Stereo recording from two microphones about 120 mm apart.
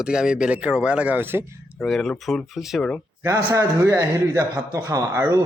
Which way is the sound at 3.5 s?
25° right (ahead or behind).